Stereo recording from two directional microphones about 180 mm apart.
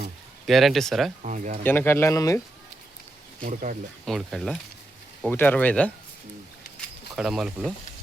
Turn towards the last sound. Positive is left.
turn(degrees=-5)  # may be behind; listen again after turning